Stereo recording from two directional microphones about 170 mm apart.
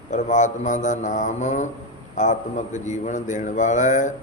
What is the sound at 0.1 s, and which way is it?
Mantra, 45° left (ahead or behind).